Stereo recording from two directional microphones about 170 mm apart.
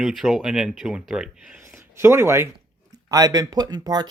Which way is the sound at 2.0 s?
15° right (ahead or behind).